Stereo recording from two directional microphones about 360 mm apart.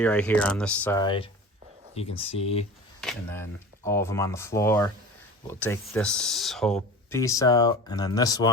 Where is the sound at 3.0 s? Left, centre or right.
Centre.